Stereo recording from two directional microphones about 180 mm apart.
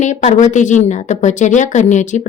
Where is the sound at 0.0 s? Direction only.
40° left (ahead or behind).